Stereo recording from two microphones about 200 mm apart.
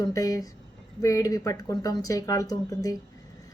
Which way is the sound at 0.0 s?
15° left (ahead or behind).